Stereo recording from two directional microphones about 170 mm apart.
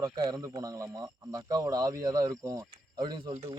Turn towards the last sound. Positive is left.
turn(degrees=-35)  # may be behind; listen again after turning